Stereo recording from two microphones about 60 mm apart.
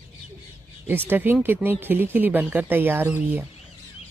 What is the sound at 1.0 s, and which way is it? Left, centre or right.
Speech, right.